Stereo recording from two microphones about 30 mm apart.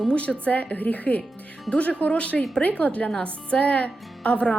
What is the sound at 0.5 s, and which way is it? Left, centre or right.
Speech, left.